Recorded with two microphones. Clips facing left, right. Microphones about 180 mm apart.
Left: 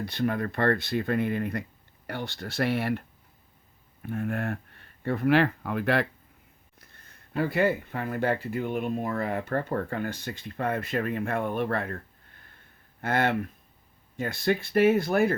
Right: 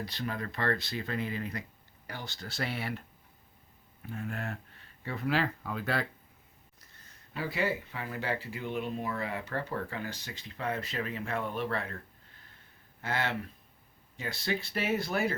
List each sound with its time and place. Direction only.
0.0 s speech: 55° left (ahead or behind)
4.0 s speech: 55° left (ahead or behind)